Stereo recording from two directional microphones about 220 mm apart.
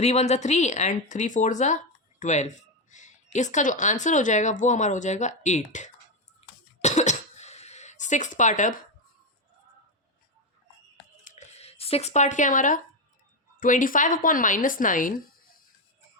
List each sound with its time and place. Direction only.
0.0 s speech: 30° left (ahead or behind)
6.4 s cough: 30° left (ahead or behind)
11.2 s a sound: 35° left (ahead or behind)
13.6 s speech: 35° left (ahead or behind)